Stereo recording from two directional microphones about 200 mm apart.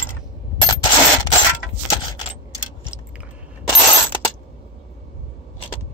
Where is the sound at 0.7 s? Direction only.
20° left (ahead or behind).